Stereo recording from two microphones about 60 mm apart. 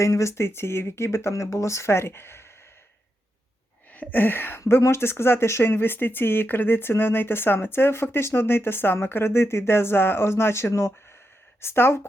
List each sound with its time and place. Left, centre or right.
0.0 s speech: left
3.9 s speech: left
11.6 s speech: left